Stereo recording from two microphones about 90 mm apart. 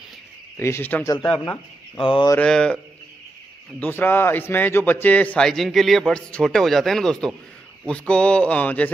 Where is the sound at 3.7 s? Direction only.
20° left (ahead or behind).